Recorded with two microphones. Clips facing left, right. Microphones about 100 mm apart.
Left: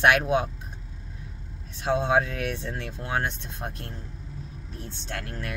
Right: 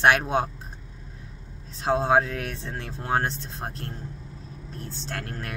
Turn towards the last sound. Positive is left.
turn(degrees=-40)  # may be behind; listen again after turning